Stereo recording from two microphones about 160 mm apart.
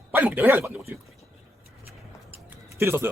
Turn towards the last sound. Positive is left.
turn(degrees=-15)  # may be behind; listen again after turning